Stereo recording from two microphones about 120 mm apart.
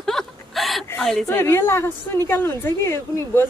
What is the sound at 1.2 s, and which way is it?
A woman's voice, 20° left (ahead or behind).